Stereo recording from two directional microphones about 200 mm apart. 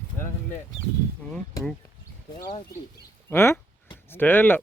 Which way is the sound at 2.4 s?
25° left (ahead or behind).